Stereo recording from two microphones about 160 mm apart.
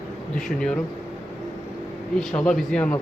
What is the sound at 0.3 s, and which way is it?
Speech, 5° left (ahead or behind).